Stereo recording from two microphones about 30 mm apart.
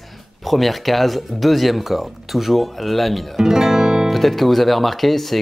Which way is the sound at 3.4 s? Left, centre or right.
Centre.